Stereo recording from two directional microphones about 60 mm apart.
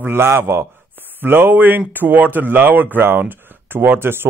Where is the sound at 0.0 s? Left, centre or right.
Right.